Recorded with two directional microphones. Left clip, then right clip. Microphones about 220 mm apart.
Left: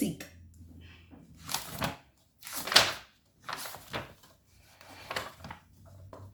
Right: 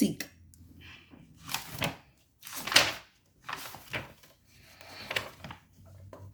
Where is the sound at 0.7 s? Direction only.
55° right (ahead or behind).